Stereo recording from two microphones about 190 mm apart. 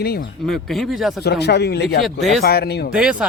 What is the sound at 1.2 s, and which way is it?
Speech, 60° left (ahead or behind).